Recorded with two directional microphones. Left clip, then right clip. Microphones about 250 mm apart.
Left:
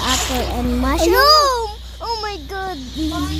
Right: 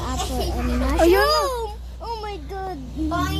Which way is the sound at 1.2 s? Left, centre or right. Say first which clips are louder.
Left 7 dB; left.